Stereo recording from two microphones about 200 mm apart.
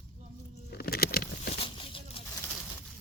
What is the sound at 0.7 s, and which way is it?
Patter, 50° left (ahead or behind).